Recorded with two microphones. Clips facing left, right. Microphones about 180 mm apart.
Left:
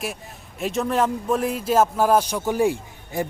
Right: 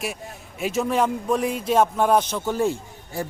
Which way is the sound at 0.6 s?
Centre (ahead or behind).